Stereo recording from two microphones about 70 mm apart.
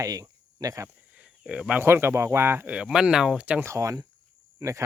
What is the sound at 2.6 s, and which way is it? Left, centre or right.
Speech, centre.